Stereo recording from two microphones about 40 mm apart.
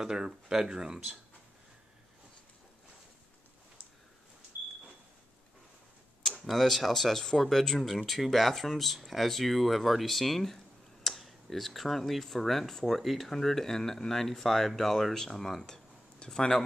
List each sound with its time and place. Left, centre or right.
0.0 s speech: centre
6.4 s speech: centre